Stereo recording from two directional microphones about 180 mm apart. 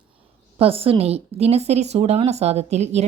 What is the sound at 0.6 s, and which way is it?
Speech, 30° right (ahead or behind).